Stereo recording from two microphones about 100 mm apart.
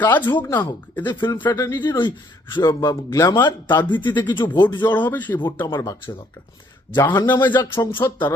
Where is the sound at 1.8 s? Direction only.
50° left (ahead or behind).